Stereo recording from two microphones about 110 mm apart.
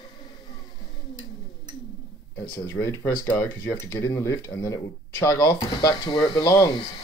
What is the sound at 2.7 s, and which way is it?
Speech, 25° left (ahead or behind).